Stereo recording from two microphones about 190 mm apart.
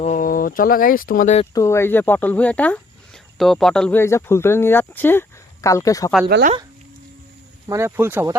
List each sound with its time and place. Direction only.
0.0 s speech: 45° left (ahead or behind)
1.5 s speech: 15° left (ahead or behind)
6.2 s speech: 55° right (ahead or behind)
7.7 s speech: 15° right (ahead or behind)